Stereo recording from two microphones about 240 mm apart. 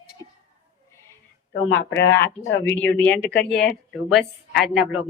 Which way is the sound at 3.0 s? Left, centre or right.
Centre.